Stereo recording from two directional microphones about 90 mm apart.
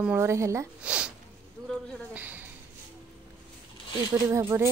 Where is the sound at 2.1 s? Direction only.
20° right (ahead or behind).